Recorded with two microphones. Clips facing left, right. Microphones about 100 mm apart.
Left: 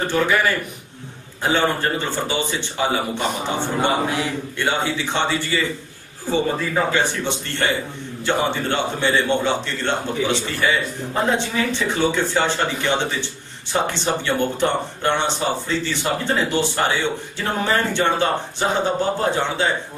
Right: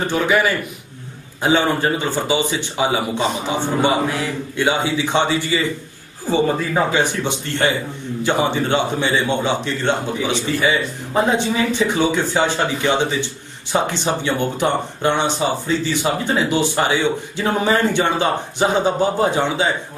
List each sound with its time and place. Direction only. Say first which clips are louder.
0.1 s speech: right 2 dB; 15° right (ahead or behind)